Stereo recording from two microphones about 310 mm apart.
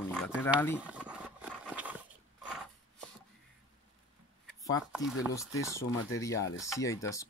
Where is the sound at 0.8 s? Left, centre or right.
Centre.